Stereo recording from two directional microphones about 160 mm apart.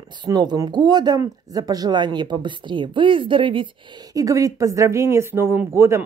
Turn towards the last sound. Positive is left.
turn(degrees=-15)  # may be behind; listen again after turning